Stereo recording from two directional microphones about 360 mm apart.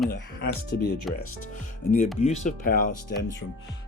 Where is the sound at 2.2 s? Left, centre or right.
Centre.